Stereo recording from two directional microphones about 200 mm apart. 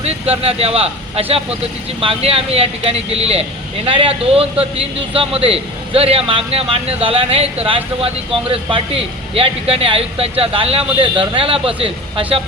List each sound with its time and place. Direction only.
0.0 s a man's voice: 30° right (ahead or behind)